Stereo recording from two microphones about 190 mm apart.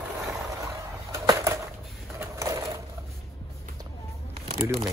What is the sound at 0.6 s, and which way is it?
Bird, 15° right (ahead or behind).